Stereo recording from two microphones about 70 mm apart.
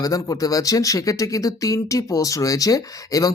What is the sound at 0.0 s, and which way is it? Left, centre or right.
Speech, left.